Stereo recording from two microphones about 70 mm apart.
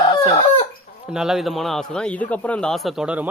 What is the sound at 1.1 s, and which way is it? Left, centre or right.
A man's voice, centre.